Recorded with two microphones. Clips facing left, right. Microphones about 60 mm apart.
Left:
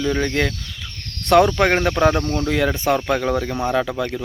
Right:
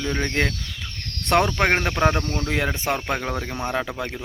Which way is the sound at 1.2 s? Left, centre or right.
Right.